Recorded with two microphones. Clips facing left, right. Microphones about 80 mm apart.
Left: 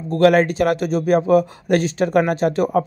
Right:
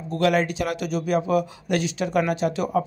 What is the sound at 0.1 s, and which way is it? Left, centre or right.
Speech, left.